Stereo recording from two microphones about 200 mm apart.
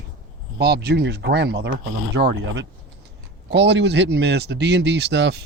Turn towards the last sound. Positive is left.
turn(degrees=-60)  # may be behind; listen again after turning